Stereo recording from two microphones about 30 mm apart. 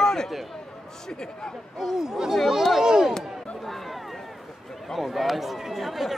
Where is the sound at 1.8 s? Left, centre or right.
Centre.